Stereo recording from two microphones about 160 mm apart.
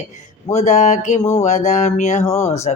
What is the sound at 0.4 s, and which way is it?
Speech, 45° left (ahead or behind).